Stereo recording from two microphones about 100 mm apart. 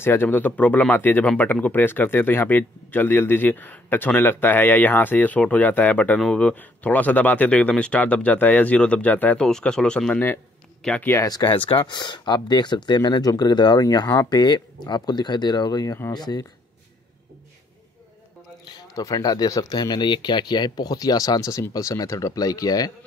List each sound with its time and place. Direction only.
0.0 s speech: 20° left (ahead or behind)
11.2 s speech: 40° left (ahead or behind)
11.5 s speech: 60° left (ahead or behind)
11.8 s speech: 50° left (ahead or behind)
18.7 s speech: 40° left (ahead or behind)